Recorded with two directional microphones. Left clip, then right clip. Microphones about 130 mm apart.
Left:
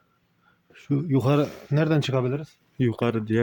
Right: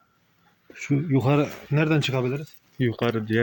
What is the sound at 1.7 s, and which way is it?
Speech, 45° left (ahead or behind).